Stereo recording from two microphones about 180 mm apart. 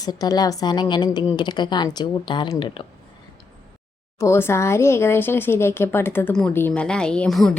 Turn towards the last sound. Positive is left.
turn(degrees=0)  # may be behind; listen again after turning